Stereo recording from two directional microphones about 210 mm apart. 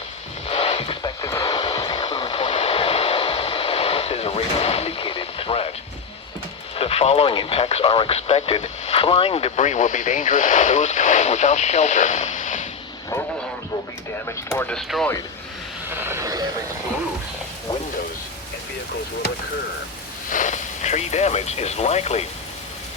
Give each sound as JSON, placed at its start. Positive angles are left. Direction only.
{"t": 0.4, "sound": "a sound", "side_deg": 30}
{"t": 6.7, "sound": "speech", "side_deg": 25}
{"t": 14.3, "sound": "speech", "side_deg": 10}
{"t": 15.9, "sound": "vehicle", "side_deg": -10}
{"t": 20.3, "sound": "speech", "side_deg": 35}